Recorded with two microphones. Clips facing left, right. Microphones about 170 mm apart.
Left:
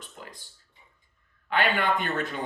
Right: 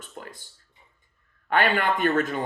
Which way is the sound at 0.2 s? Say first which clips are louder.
Right 5 dB; 50° right (ahead or behind).